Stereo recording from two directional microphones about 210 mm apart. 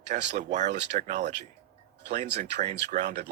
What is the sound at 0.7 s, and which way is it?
Speech, 55° right (ahead or behind).